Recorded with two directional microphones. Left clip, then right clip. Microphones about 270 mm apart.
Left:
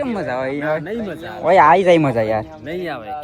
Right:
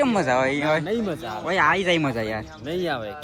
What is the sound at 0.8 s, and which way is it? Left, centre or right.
Speech, centre.